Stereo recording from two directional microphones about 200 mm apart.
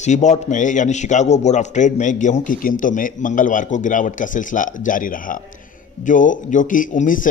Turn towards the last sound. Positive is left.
turn(degrees=40)  # may be behind; listen again after turning